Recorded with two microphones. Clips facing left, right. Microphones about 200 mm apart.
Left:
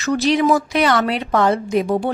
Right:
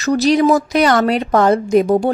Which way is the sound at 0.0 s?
40° right (ahead or behind).